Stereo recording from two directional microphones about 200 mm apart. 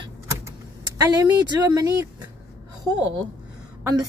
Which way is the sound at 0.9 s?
20° right (ahead or behind).